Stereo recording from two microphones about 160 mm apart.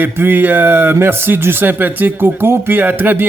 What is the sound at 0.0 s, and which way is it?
Speech, 10° right (ahead or behind).